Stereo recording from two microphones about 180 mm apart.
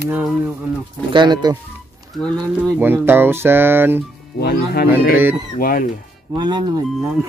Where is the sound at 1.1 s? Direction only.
25° right (ahead or behind).